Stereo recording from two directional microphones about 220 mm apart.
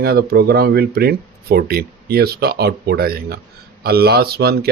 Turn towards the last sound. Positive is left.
turn(degrees=-45)  # may be behind; listen again after turning